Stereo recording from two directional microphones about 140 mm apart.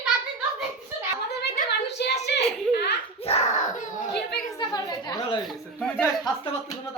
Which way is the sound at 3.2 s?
45° left (ahead or behind).